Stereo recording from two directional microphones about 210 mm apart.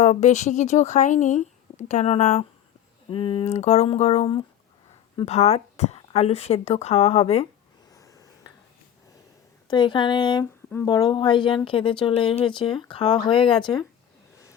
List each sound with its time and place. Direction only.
0.0 s speech: 35° left (ahead or behind)
7.9 s finger snapping: 15° left (ahead or behind)
9.6 s speech: 20° left (ahead or behind)